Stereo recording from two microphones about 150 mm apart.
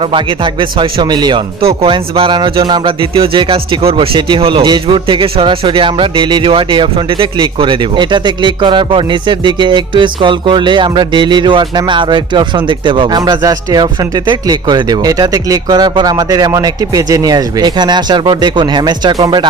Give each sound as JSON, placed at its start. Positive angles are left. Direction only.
{"t": 0.0, "sound": "speech", "side_deg": -35}